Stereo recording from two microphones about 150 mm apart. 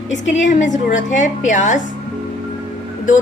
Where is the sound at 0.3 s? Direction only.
55° left (ahead or behind).